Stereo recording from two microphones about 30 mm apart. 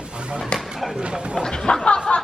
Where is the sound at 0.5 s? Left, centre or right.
Left.